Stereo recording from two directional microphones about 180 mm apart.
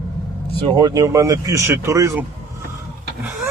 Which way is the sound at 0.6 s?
25° right (ahead or behind).